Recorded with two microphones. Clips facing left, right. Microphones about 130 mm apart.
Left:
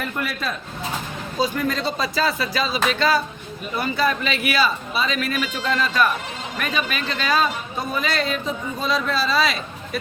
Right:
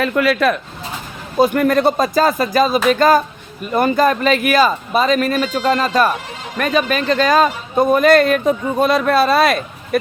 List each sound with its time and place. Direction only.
0.0 s speech: 90° right; by 0.6 s 70° right (ahead or behind)
1.4 s a man's voice: 60° right (ahead or behind)